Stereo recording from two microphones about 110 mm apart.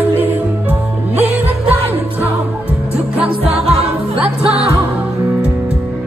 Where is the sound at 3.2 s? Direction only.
65° right (ahead or behind).